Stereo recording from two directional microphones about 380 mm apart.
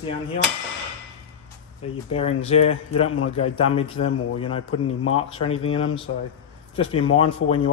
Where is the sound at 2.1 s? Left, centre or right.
Centre.